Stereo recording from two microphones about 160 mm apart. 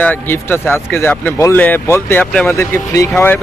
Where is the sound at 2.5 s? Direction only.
20° left (ahead or behind).